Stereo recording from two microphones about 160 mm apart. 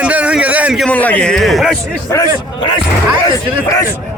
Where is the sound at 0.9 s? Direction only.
10° left (ahead or behind).